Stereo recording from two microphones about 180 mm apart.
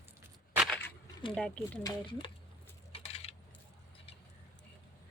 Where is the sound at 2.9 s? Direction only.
35° left (ahead or behind).